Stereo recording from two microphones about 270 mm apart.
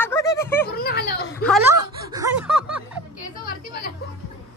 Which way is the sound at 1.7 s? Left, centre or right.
Centre.